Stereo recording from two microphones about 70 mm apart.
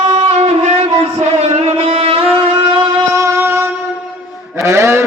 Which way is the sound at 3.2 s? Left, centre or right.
Right.